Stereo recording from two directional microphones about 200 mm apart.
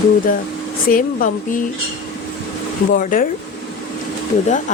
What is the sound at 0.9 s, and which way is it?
Speech, 45° left (ahead or behind).